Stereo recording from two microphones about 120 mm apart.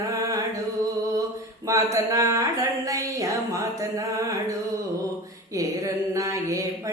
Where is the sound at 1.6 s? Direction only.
25° right (ahead or behind).